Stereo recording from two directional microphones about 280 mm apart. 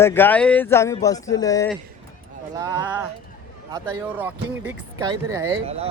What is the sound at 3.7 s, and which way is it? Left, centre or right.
Speech, centre.